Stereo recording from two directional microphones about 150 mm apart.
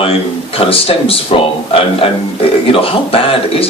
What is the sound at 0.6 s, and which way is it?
Speech, 40° left (ahead or behind).